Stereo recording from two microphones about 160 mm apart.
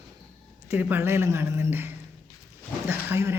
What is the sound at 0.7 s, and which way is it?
A man's voice, 10° right (ahead or behind).